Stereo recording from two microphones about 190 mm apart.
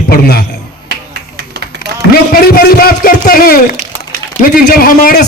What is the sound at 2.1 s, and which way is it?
Speech, 50° left (ahead or behind).